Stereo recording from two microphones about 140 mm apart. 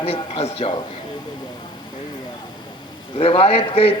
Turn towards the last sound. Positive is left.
turn(degrees=45)  # may be behind; listen again after turning